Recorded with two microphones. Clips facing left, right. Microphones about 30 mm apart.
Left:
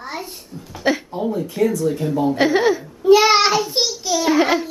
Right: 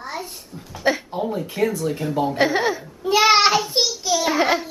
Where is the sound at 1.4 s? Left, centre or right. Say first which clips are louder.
Left 4 dB; centre.